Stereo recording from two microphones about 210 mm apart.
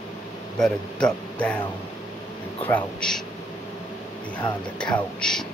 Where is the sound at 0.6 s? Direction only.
5° left (ahead or behind).